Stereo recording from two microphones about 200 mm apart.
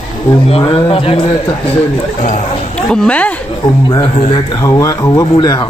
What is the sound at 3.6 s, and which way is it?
Speech, 20° left (ahead or behind).